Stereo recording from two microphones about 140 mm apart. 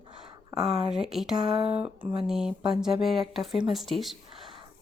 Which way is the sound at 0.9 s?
5° right (ahead or behind).